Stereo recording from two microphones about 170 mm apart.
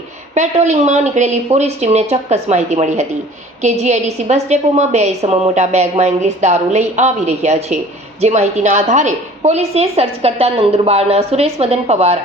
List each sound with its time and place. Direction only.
0.3 s a woman's voice: 40° right (ahead or behind)